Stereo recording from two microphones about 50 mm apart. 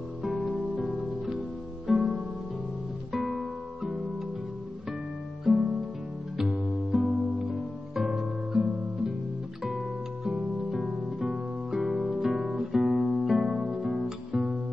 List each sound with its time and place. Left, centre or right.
0.2 s music: centre
3.1 s guitar: centre
5.4 s music: centre
10.9 s music: right
11.1 s music: centre
12.5 s guitar: centre